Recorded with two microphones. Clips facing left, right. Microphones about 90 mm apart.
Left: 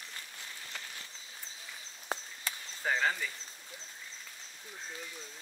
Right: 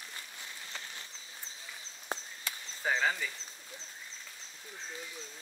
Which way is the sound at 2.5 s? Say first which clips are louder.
Left 2 dB; 35° left (ahead or behind).